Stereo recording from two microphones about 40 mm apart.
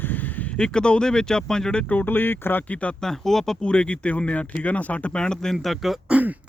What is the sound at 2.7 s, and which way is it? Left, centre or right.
Speech, left.